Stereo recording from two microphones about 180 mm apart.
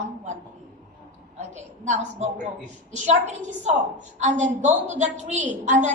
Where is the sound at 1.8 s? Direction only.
40° right (ahead or behind).